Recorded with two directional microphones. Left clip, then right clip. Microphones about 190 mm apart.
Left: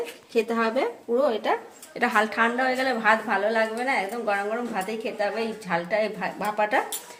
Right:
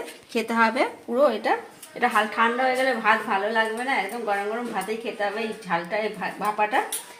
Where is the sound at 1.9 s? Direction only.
30° left (ahead or behind).